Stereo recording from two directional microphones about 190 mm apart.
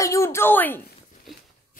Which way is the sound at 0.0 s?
15° left (ahead or behind).